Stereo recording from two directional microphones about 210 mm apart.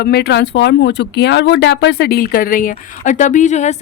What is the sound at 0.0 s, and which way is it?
Speech, 50° left (ahead or behind).